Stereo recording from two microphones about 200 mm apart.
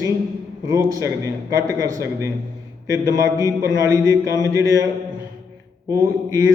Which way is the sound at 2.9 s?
15° right (ahead or behind).